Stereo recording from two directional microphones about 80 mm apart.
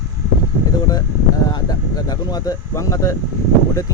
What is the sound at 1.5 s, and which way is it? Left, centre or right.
Speech, left.